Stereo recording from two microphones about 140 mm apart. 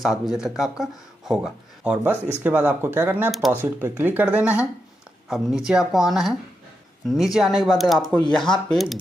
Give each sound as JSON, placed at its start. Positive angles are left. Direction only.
{"t": 0.0, "sound": "speech", "side_deg": 0}
{"t": 2.4, "sound": "speech", "side_deg": -15}
{"t": 3.3, "sound": "speech", "side_deg": 0}
{"t": 3.5, "sound": "speech", "side_deg": -15}